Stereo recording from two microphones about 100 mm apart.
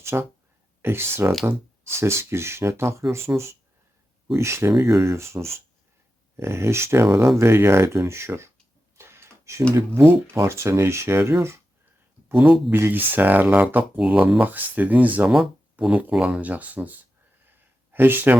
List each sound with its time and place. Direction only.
0.1 s speech: 25° right (ahead or behind)
9.0 s a sound: 25° right (ahead or behind)
10.3 s speech: 30° right (ahead or behind)
12.4 s speech: centre (ahead or behind)
12.7 s speech: 20° right (ahead or behind)
17.9 s speech: 20° right (ahead or behind)